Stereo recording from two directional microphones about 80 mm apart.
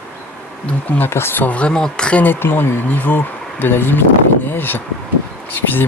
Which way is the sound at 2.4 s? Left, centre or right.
Left.